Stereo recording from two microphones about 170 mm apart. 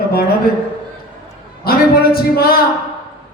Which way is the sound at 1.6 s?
65° left (ahead or behind).